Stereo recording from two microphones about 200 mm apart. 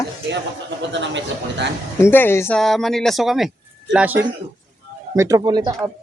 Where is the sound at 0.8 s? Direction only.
60° right (ahead or behind).